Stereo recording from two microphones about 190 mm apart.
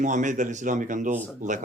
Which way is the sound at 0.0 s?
40° right (ahead or behind).